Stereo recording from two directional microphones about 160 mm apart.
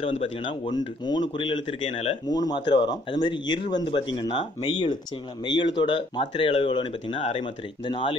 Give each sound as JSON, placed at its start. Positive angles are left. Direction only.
{"t": 0.0, "sound": "speech", "side_deg": 35}
{"t": 2.2, "sound": "speech", "side_deg": 25}